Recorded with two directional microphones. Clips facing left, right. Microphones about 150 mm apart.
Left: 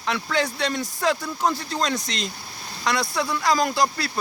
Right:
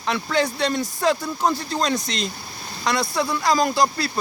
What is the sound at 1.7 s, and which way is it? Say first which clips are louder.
Speech: right 2 dB; 45° right (ahead or behind).